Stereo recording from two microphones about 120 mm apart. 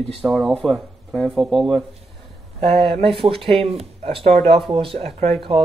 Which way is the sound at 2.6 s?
55° right (ahead or behind).